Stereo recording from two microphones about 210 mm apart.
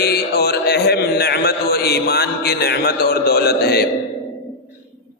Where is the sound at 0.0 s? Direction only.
50° left (ahead or behind).